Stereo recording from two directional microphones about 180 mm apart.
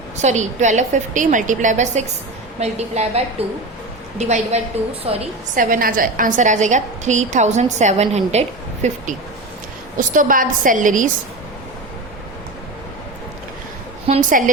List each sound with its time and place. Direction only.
0.2 s a woman's voice: 40° right (ahead or behind)
5.5 s a woman's voice: 50° right (ahead or behind)
10.2 s a woman's voice: 50° right (ahead or behind)
14.1 s a woman's voice: 45° right (ahead or behind)